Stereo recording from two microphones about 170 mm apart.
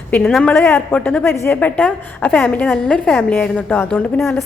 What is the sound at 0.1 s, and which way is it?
A woman's voice, centre (ahead or behind).